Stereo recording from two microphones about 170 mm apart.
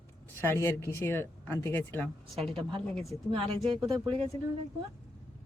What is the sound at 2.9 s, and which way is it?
Speech, centre (ahead or behind).